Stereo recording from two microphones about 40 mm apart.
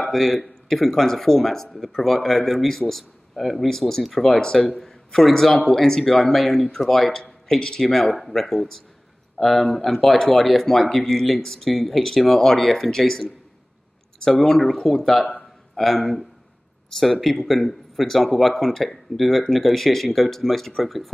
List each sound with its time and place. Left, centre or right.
0.0 s speech: centre
4.7 s a man's voice: centre